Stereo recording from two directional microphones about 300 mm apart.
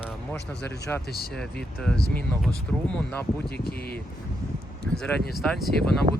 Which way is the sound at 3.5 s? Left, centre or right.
Left.